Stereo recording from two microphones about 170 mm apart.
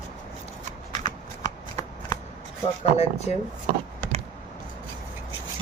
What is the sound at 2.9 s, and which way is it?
Speech, 40° left (ahead or behind).